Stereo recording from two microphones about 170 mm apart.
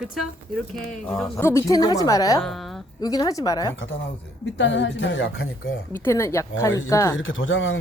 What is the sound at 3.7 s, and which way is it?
A woman's voice, 90° left.